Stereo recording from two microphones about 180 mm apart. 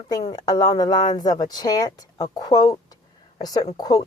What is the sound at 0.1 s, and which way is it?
Speech, 20° left (ahead or behind).